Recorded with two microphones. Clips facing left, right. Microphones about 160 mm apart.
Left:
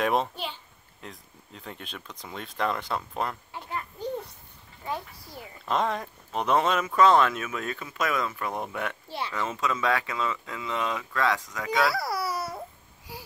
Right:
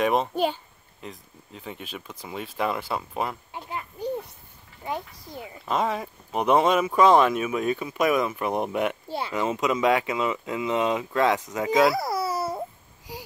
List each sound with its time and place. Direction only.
0.0 s speech: centre (ahead or behind)
4.8 s speech: 20° right (ahead or behind)
5.7 s speech: 5° right (ahead or behind); by 13.2 s 20° right (ahead or behind)